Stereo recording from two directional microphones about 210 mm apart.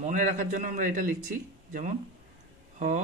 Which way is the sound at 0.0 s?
35° right (ahead or behind).